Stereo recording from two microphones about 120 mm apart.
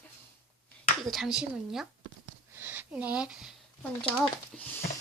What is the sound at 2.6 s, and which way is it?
Speech, 15° right (ahead or behind).